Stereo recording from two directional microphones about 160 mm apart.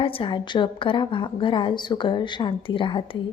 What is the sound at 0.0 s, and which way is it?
A woman's voice, 35° left (ahead or behind).